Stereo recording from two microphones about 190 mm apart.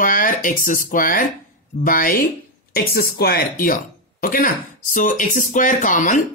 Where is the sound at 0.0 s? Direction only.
45° left (ahead or behind).